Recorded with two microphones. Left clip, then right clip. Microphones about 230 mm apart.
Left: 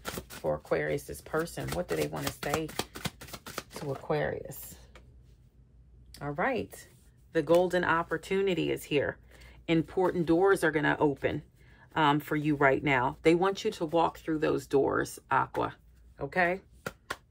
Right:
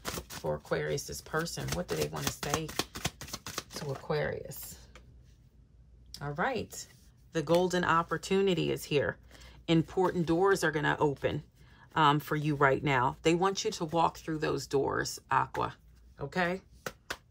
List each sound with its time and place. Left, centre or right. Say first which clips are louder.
0.5 s speech: left 3 dB; right
1.9 s speech: even; right
3.3 s shuffling cards: right 1 dB; right
4.1 s speech: left 2 dB; right
6.1 s speech: left 2 dB; centre